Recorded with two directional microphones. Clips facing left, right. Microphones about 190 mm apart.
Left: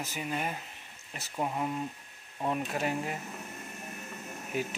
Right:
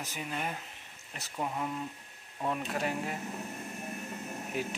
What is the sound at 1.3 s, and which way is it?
Speech, 20° left (ahead or behind).